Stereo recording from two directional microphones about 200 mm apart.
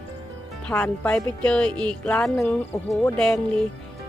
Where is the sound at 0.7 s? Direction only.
5° left (ahead or behind).